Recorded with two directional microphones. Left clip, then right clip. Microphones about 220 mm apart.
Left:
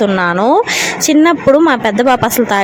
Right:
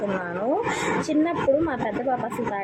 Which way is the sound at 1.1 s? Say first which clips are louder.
Left 14 dB; 45° left (ahead or behind).